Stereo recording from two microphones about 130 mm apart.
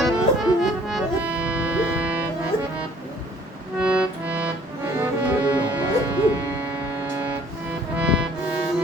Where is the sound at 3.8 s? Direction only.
10° right (ahead or behind).